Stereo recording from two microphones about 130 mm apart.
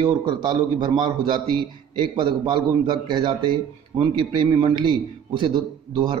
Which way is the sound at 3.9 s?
50° right (ahead or behind).